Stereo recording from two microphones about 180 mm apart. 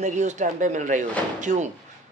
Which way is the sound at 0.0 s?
40° right (ahead or behind).